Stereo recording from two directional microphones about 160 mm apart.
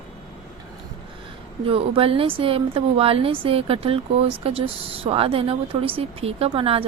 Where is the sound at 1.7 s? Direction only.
35° right (ahead or behind).